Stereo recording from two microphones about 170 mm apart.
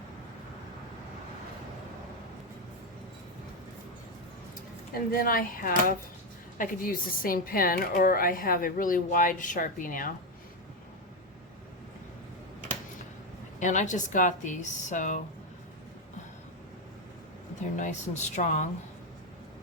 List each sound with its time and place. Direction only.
4.9 s a woman's voice: 60° left (ahead or behind)
13.6 s speech: 45° left (ahead or behind)
17.6 s speech: 45° left (ahead or behind)